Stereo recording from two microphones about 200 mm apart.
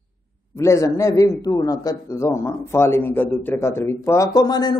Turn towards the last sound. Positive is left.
turn(degrees=20)  # may be behind; listen again after turning